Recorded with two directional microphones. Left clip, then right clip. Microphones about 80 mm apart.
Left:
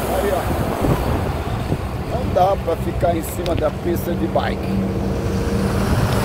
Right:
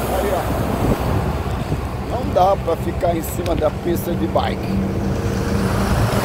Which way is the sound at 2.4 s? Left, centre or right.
Right.